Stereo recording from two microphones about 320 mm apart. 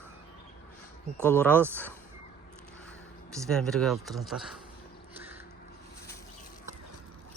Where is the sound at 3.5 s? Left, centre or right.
Centre.